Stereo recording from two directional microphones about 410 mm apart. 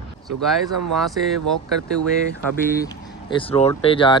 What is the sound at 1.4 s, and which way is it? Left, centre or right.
Speech, right.